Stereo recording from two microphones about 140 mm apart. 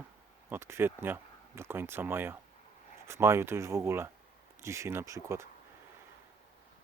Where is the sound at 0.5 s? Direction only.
15° right (ahead or behind).